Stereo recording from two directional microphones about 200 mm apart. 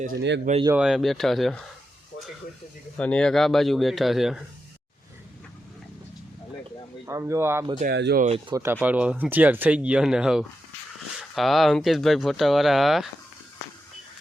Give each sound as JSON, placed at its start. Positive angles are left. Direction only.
{"t": 0.1, "sound": "speech", "side_deg": -60}
{"t": 0.8, "sound": "speech", "side_deg": 0}
{"t": 3.0, "sound": "speech", "side_deg": 5}
{"t": 7.0, "sound": "speech", "side_deg": -15}
{"t": 7.8, "sound": "speech", "side_deg": -55}
{"t": 8.2, "sound": "speech", "side_deg": -30}
{"t": 8.5, "sound": "speech", "side_deg": -10}